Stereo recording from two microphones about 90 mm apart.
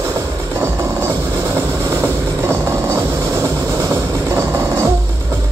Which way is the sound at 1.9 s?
25° right (ahead or behind).